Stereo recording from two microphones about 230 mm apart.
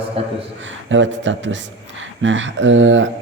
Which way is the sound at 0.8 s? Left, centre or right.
Right.